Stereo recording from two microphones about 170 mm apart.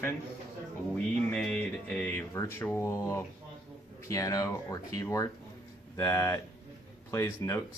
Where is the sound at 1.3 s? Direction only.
5° left (ahead or behind).